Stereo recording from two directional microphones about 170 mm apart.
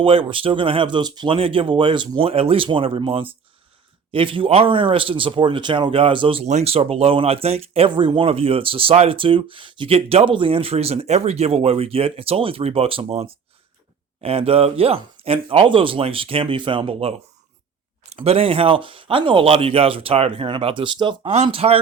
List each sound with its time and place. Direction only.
0.0 s speech: 30° right (ahead or behind)